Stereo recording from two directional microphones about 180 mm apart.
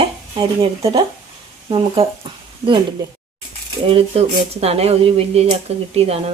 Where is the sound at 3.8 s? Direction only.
35° right (ahead or behind).